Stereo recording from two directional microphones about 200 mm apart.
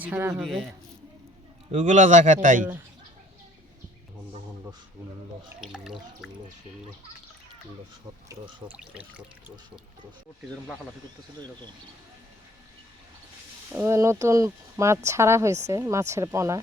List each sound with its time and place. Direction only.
0.0 s speech: 10° right (ahead or behind)
1.7 s a man's voice: 35° right (ahead or behind)
5.5 s speech: 5° right (ahead or behind)
8.6 s speech: 5° right (ahead or behind)
13.7 s speech: 10° right (ahead or behind)